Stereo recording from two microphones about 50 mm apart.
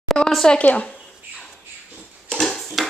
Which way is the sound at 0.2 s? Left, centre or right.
Left.